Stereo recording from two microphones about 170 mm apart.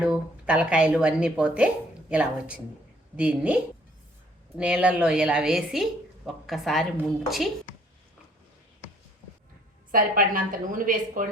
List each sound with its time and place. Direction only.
0.0 s a woman's voice: 5° right (ahead or behind)
9.9 s a woman's voice: 55° right (ahead or behind)